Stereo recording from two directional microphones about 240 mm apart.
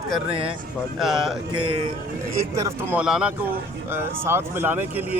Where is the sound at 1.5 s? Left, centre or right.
Right.